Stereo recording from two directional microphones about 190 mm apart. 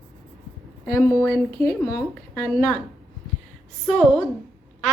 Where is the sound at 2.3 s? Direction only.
5° left (ahead or behind).